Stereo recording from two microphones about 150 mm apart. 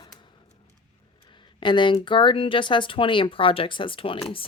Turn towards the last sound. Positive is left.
turn(degrees=35)  # may be behind; listen again after turning